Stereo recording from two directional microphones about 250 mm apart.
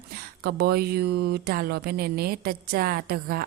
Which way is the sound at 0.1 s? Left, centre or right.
Right.